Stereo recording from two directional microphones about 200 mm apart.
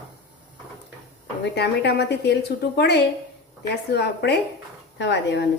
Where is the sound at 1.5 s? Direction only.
55° left (ahead or behind).